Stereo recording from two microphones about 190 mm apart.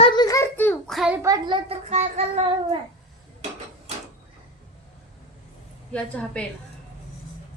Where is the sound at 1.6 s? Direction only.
35° right (ahead or behind).